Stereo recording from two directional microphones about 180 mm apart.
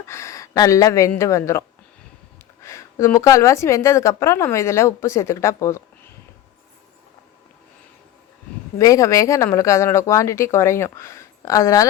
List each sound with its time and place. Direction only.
0.1 s a woman's voice: 15° left (ahead or behind)
8.8 s a woman's voice: 20° left (ahead or behind)